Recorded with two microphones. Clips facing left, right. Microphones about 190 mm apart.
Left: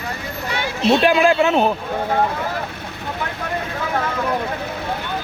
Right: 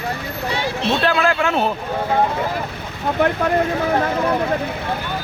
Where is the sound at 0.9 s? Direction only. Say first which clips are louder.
Left 5 dB; 15° left (ahead or behind).